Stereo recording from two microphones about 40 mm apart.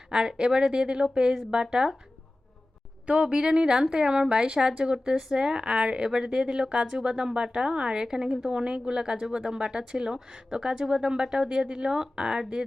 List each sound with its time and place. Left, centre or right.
0.1 s speech: centre
3.1 s speech: centre